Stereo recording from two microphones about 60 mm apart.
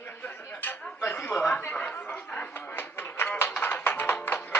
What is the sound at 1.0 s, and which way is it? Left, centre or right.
Chuckle, left.